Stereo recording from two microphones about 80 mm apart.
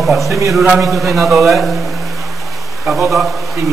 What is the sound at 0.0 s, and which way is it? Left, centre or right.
Speech, centre.